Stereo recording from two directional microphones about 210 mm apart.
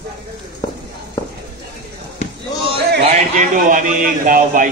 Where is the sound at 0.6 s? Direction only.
20° left (ahead or behind).